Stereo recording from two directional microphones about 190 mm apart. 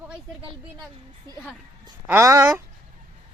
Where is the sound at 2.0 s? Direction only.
15° right (ahead or behind).